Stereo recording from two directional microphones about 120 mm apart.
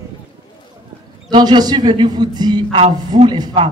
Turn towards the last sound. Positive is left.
turn(degrees=-40)  # may be behind; listen again after turning